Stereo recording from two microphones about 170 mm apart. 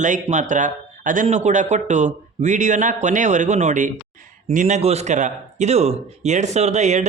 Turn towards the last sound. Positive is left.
turn(degrees=-45)  # may be behind; listen again after turning